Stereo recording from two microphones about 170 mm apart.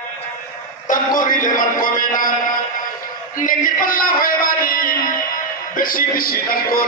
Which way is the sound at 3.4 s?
55° left (ahead or behind).